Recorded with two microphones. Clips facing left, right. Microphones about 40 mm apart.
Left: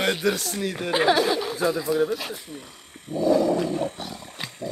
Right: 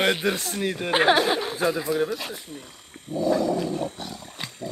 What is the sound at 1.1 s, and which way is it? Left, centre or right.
Speech, right.